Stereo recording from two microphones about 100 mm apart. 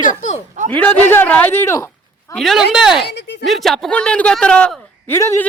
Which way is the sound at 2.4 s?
Centre (ahead or behind).